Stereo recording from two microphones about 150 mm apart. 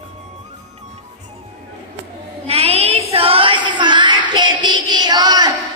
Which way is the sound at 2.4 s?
40° right (ahead or behind).